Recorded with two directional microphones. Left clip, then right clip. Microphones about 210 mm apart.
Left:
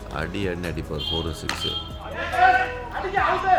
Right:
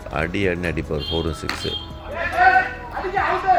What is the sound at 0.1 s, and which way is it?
Speech, 10° right (ahead or behind).